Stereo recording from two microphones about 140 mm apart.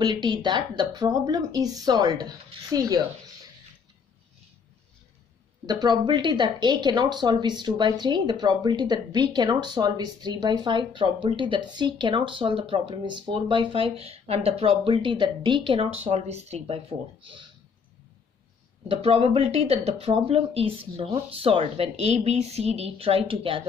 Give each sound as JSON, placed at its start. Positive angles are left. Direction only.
{"t": 0.0, "sound": "a woman's voice", "side_deg": -30}
{"t": 5.7, "sound": "speech", "side_deg": -30}
{"t": 18.9, "sound": "speech", "side_deg": -45}